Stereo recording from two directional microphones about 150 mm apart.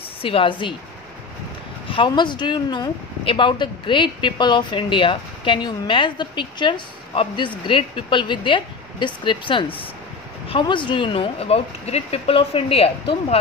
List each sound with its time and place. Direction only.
0.2 s speech: 35° left (ahead or behind)
1.9 s speech: 30° left (ahead or behind)